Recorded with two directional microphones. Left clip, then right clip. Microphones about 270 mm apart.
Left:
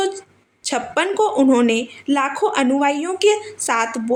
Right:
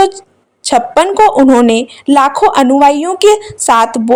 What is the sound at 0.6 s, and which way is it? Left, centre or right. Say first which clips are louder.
A woman's voice: right 11 dB; right.